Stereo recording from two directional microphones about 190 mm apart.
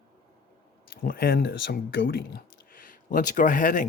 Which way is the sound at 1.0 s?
50° left (ahead or behind).